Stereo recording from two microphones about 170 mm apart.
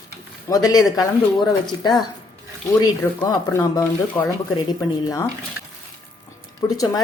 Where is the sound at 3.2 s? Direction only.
20° left (ahead or behind).